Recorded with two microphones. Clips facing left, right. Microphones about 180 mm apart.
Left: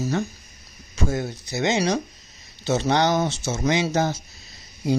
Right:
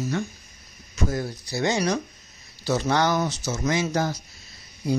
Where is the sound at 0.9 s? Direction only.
25° left (ahead or behind).